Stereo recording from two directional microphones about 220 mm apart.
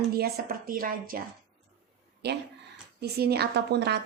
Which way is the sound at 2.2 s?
50° right (ahead or behind).